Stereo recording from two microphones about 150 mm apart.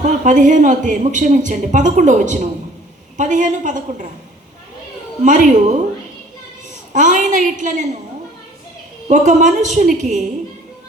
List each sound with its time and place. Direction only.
0.0 s a woman's voice: 55° right (ahead or behind)
5.2 s a woman's voice: 60° right (ahead or behind)
6.9 s a woman's voice: 55° right (ahead or behind)
9.0 s a woman's voice: 55° right (ahead or behind)